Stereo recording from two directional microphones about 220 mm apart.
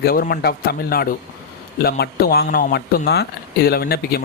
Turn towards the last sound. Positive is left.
turn(degrees=45)  # may be behind; listen again after turning